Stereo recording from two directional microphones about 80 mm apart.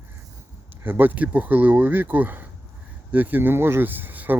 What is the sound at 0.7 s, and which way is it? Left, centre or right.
Speech, right.